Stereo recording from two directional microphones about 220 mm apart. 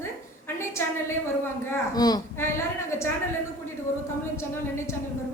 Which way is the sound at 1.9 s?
15° left (ahead or behind).